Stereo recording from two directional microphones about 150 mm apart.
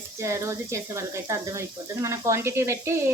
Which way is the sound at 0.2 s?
20° right (ahead or behind).